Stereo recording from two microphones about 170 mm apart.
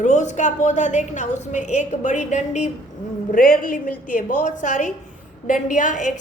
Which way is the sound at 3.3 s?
55° left (ahead or behind).